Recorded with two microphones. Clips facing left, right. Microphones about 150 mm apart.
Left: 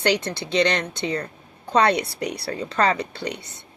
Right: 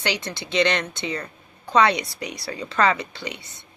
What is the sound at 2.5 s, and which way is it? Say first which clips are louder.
Speech: right 1 dB; 40° left (ahead or behind).